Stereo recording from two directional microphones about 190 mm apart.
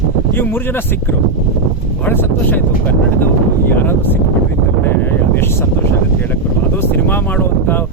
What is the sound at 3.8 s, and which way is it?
Speech, 10° left (ahead or behind).